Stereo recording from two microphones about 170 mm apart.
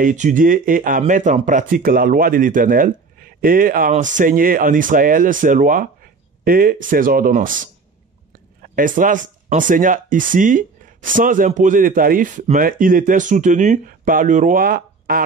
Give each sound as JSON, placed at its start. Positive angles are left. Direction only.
{"t": 0.0, "sound": "speech", "side_deg": -50}
{"t": 8.7, "sound": "speech", "side_deg": -50}